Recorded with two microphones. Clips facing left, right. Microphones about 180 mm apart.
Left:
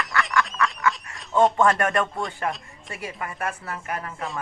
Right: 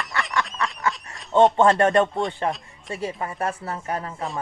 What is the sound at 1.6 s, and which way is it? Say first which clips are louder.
Speech: right 4 dB; 30° right (ahead or behind).